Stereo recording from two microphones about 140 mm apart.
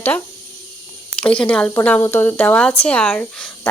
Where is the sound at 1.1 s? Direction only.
10° left (ahead or behind).